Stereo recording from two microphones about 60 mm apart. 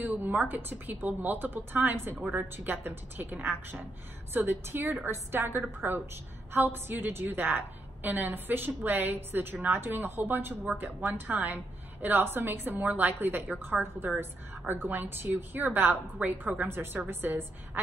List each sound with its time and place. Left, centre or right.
0.0 s a woman's voice: right